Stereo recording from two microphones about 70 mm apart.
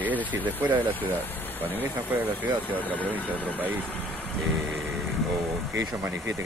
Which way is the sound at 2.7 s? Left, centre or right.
Left.